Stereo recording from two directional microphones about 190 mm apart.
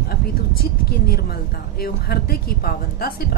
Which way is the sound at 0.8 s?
55° left (ahead or behind).